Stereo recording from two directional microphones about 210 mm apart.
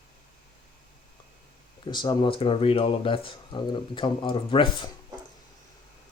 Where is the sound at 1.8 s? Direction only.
20° left (ahead or behind).